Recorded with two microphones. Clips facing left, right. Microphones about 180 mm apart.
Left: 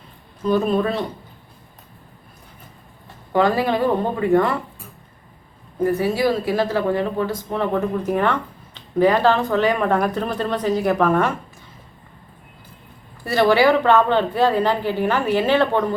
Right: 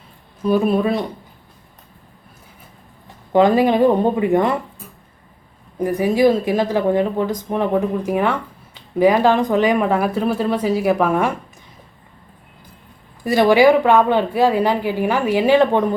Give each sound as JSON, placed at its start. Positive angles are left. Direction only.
{"t": 0.4, "sound": "speech", "side_deg": -10}
{"t": 3.3, "sound": "speech", "side_deg": -20}
{"t": 5.8, "sound": "speech", "side_deg": -15}
{"t": 13.2, "sound": "speech", "side_deg": -15}